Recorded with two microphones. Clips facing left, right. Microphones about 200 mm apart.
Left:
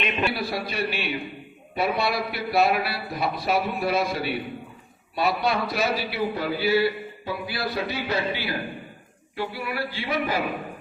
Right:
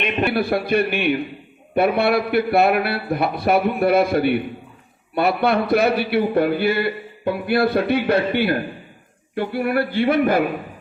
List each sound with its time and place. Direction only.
0.0 s a man's voice: 55° right (ahead or behind)